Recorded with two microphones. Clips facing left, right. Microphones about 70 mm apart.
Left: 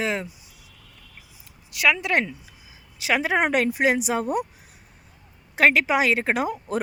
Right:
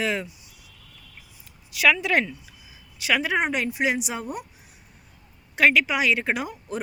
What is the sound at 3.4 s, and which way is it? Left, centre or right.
Speech, left.